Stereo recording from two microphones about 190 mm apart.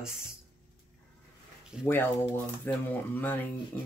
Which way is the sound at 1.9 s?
10° left (ahead or behind).